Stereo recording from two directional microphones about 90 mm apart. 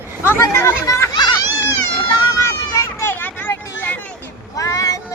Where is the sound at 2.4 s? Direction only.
35° left (ahead or behind).